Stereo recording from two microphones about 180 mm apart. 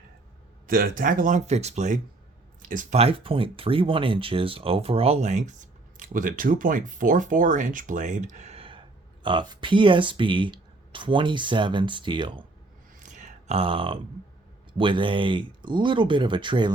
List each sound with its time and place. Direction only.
0.7 s speech: 55° right (ahead or behind)
3.0 s speech: 30° right (ahead or behind)
13.0 s a sound: 45° right (ahead or behind)
14.7 s speech: 30° right (ahead or behind)